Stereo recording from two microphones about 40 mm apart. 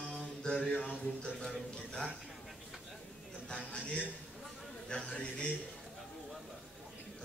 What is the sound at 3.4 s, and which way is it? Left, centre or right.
A man's voice, left.